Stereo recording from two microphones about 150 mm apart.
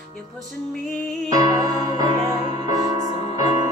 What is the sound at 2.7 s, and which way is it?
Music, 25° right (ahead or behind).